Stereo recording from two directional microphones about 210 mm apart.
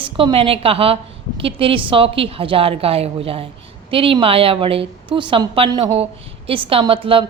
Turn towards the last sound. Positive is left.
turn(degrees=-25)  # may be behind; listen again after turning